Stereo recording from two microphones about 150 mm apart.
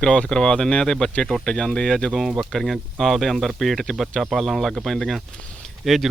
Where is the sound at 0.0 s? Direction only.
5° left (ahead or behind).